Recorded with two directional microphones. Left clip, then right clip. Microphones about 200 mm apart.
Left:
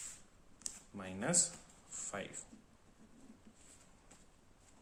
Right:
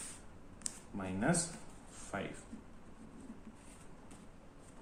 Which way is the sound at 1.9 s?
40° left (ahead or behind).